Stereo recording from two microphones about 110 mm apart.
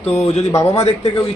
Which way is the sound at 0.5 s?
30° left (ahead or behind).